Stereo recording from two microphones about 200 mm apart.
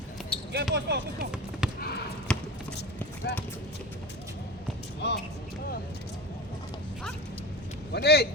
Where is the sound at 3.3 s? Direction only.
55° left (ahead or behind).